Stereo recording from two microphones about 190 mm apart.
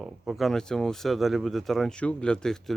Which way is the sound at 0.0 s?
Centre (ahead or behind).